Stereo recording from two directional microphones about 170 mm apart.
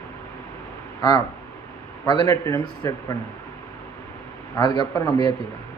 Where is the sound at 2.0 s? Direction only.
20° left (ahead or behind).